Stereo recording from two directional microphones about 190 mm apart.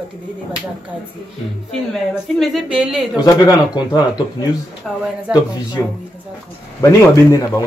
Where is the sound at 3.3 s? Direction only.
20° left (ahead or behind).